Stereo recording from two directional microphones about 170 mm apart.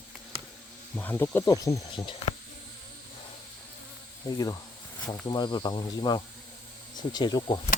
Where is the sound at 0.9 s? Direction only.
10° left (ahead or behind); by 2.4 s 30° left (ahead or behind).